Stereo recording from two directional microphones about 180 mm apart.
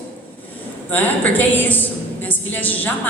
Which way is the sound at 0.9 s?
10° left (ahead or behind).